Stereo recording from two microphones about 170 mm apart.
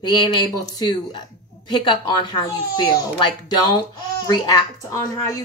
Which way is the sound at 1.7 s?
25° left (ahead or behind).